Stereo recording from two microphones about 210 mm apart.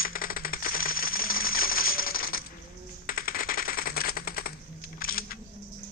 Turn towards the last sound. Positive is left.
turn(degrees=45)  # may be behind; listen again after turning